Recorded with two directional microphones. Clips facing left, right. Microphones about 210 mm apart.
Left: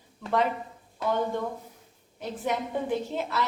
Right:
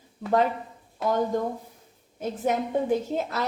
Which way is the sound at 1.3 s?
40° right (ahead or behind).